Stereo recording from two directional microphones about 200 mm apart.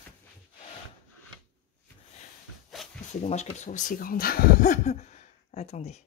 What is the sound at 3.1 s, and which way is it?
Speech, 35° left (ahead or behind).